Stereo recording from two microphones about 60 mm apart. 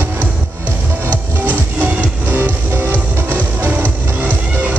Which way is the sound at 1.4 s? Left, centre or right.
Right.